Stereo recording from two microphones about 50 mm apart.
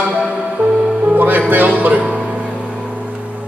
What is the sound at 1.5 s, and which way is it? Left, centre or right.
Speech, right.